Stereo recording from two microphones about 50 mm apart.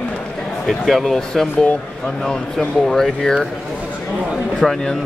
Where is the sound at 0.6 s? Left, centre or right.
Centre.